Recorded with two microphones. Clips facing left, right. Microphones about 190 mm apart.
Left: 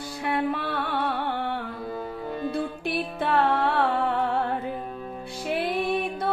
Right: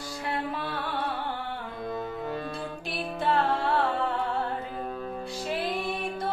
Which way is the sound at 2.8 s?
60° left (ahead or behind).